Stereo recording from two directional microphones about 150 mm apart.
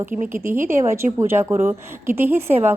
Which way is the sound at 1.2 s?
15° right (ahead or behind).